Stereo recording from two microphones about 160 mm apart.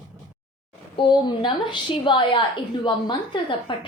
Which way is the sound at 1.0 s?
30° left (ahead or behind).